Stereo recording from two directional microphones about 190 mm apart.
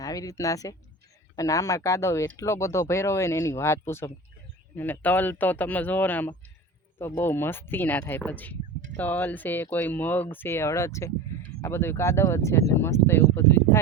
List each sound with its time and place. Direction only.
0.0 s speech: 20° left (ahead or behind)